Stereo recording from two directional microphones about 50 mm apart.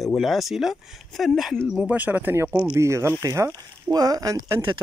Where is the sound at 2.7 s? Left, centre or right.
Right.